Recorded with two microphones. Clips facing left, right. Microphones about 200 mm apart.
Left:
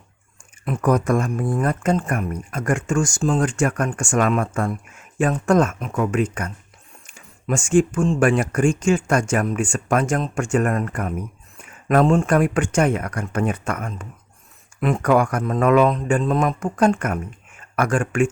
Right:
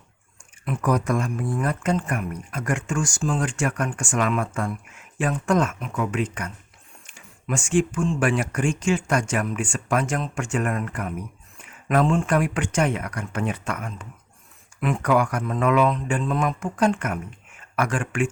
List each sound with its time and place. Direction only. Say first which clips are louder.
0.6 s speech: left 4 dB; 45° left (ahead or behind)